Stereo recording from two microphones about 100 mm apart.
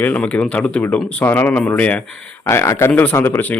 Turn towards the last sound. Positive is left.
turn(degrees=20)  # may be behind; listen again after turning